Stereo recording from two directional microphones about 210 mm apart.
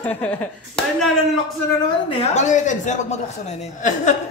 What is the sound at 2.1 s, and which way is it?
A woman's voice, 30° left (ahead or behind).